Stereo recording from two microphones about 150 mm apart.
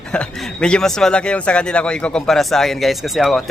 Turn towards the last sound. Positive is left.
turn(degrees=0)  # may be behind; listen again after turning